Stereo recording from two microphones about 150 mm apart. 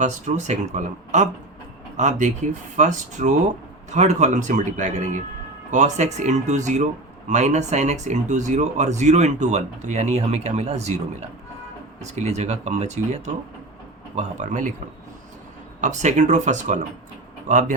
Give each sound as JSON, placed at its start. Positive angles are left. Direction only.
{"t": 0.0, "sound": "speech", "side_deg": -50}
{"t": 11.9, "sound": "speech", "side_deg": -50}
{"t": 15.8, "sound": "a man's voice", "side_deg": -55}